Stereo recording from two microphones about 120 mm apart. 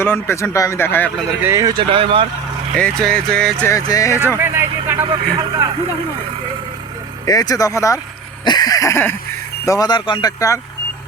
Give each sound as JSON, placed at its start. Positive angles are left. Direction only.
{"t": 0.0, "sound": "speech", "side_deg": 20}
{"t": 1.5, "sound": "speech", "side_deg": -25}
{"t": 1.7, "sound": "speech", "side_deg": -45}
{"t": 2.7, "sound": "speech", "side_deg": 10}
{"t": 3.6, "sound": "speech", "side_deg": 25}
{"t": 4.4, "sound": "a sound", "side_deg": -20}
{"t": 5.0, "sound": "a man's voice", "side_deg": -40}
{"t": 7.3, "sound": "speech", "side_deg": 30}
{"t": 8.4, "sound": "a sound", "side_deg": 35}
{"t": 9.6, "sound": "speech", "side_deg": 30}